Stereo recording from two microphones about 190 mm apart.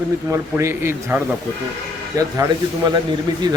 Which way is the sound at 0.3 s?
15° right (ahead or behind).